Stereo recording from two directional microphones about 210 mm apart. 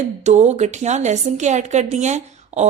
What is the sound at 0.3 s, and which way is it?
A woman's voice, 30° right (ahead or behind).